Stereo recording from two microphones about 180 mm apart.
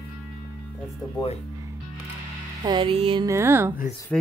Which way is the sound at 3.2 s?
15° right (ahead or behind).